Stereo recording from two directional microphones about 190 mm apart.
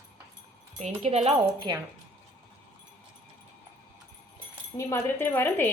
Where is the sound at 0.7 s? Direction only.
35° right (ahead or behind).